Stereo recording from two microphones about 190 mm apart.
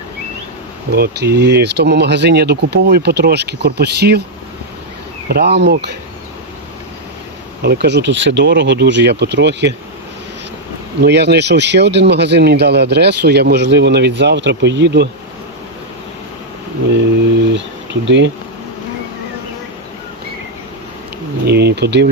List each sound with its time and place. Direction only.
0.9 s speech: 55° right (ahead or behind)
5.3 s speech: 60° right (ahead or behind)
7.6 s speech: 60° right (ahead or behind)
11.0 s speech: 60° right (ahead or behind)
18.0 s speech: 70° right (ahead or behind)
21.4 s speech: 60° right (ahead or behind)